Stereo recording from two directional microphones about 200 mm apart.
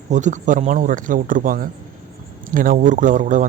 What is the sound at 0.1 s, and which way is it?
Speech, 40° right (ahead or behind).